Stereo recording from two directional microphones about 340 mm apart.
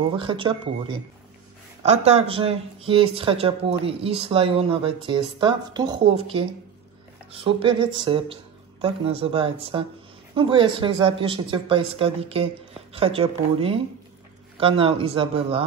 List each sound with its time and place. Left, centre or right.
0.1 s speech: centre
7.4 s speech: centre